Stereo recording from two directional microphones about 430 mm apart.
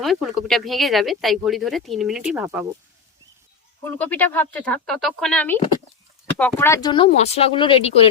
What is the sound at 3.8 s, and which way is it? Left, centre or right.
Speech, centre.